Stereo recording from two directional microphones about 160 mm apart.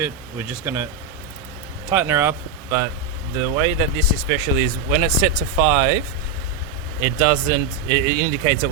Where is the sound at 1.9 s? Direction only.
15° right (ahead or behind).